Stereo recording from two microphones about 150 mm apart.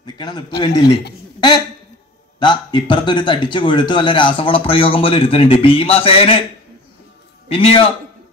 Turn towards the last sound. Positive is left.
turn(degrees=40)  # may be behind; listen again after turning